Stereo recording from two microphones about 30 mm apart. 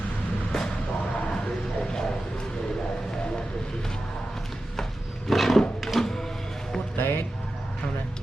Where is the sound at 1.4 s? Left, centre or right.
Centre.